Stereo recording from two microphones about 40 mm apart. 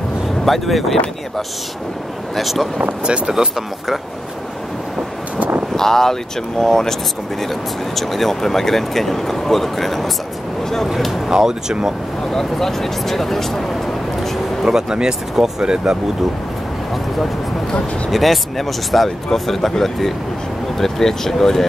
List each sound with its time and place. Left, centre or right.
0.5 s speech: centre
2.3 s speech: centre
3.1 s speech: right
3.5 s speech: centre
5.8 s speech: centre
11.2 s speech: centre
12.3 s speech: centre
14.6 s speech: centre
18.1 s speech: centre